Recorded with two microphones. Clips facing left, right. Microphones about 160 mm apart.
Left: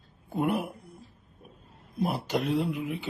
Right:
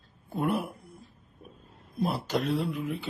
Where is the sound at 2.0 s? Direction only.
20° left (ahead or behind).